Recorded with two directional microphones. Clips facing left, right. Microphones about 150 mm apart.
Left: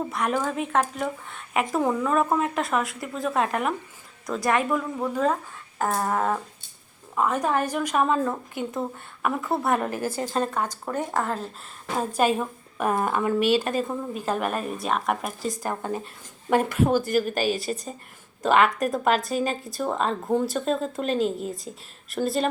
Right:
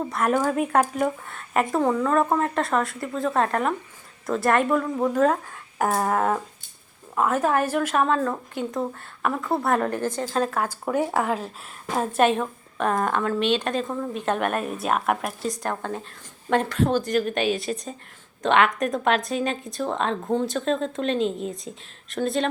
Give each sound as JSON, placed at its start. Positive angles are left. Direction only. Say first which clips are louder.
{"t": 0.1, "sound": "a woman's voice", "louder": "right 4 dB", "side_deg": 0}